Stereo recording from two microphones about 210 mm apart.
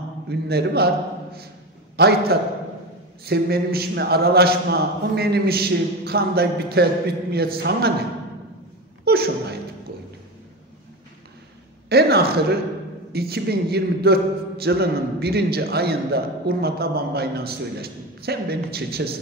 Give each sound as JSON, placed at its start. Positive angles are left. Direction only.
{"t": 0.3, "sound": "a man's voice", "side_deg": -50}
{"t": 2.0, "sound": "a man's voice", "side_deg": -50}
{"t": 9.0, "sound": "speech", "side_deg": -50}
{"t": 11.9, "sound": "a man's voice", "side_deg": -50}